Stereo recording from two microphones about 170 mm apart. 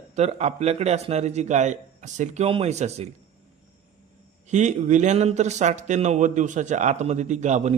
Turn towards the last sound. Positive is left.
turn(degrees=-45)  # may be behind; listen again after turning